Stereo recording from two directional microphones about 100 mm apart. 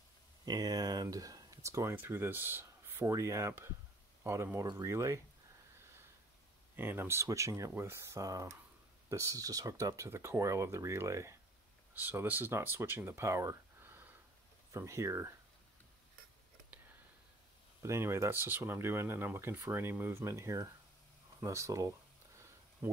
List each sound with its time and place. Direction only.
0.5 s speech: 40° right (ahead or behind)
6.8 s speech: 20° right (ahead or behind)
17.8 s speech: 25° right (ahead or behind)